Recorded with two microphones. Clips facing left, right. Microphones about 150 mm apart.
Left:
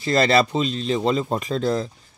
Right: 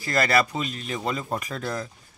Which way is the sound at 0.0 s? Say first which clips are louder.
Left 5 dB; 25° left (ahead or behind).